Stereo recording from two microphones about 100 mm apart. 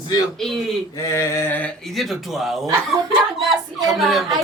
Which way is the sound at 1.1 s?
30° left (ahead or behind).